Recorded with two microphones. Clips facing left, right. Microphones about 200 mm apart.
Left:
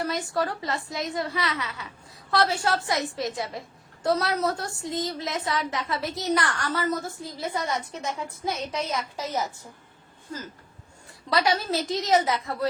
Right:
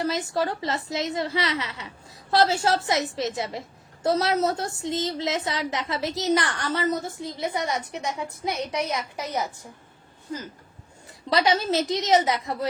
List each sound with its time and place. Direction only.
0.0 s a woman's voice: 25° right (ahead or behind)
11.3 s a woman's voice: 20° right (ahead or behind)